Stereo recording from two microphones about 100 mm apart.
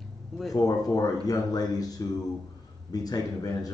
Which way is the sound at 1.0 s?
40° left (ahead or behind).